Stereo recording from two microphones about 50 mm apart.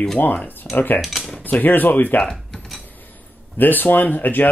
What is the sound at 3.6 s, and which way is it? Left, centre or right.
Speech, left.